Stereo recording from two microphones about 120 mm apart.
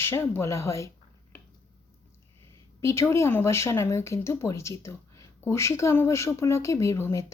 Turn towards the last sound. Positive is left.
turn(degrees=25)  # may be behind; listen again after turning